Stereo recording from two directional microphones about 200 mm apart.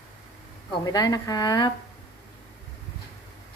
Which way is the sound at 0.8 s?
20° left (ahead or behind).